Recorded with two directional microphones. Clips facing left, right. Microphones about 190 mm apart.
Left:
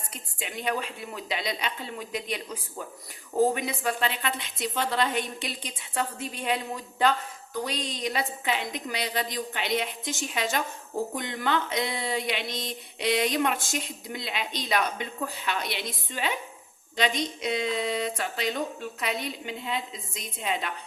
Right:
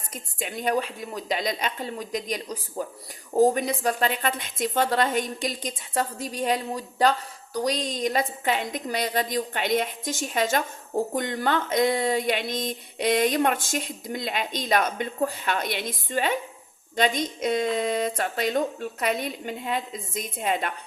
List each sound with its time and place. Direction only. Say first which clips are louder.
0.1 s a woman's voice: right 6 dB; 45° right (ahead or behind)